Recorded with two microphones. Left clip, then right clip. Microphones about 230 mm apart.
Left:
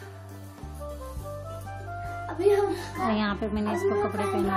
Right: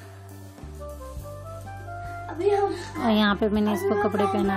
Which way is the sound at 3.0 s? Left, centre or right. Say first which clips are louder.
Right 6 dB; right.